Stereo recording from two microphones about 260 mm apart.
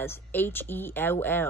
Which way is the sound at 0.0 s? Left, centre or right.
Centre.